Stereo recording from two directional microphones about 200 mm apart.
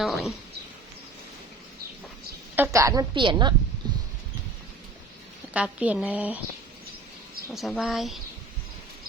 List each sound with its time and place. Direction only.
0.0 s speech: centre (ahead or behind)
2.6 s a woman's voice: 15° right (ahead or behind)
3.8 s a sound: 20° right (ahead or behind)
5.5 s a woman's voice: 5° right (ahead or behind)
7.5 s speech: centre (ahead or behind)